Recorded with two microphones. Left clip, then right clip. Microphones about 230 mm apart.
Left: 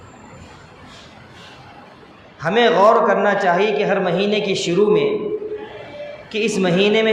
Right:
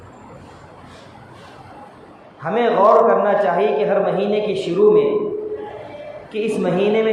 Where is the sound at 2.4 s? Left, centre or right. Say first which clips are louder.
Left 2 dB; left.